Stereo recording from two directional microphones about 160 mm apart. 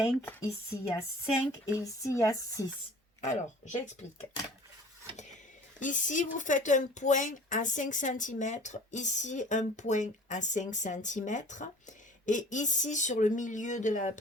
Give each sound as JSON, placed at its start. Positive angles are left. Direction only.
{"t": 0.2, "sound": "speech", "side_deg": 15}
{"t": 3.2, "sound": "speech", "side_deg": 45}
{"t": 5.8, "sound": "a woman's voice", "side_deg": 50}